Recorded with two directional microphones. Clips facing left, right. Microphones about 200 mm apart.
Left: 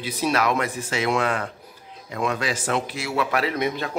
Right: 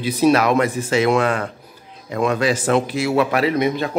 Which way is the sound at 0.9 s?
45° right (ahead or behind).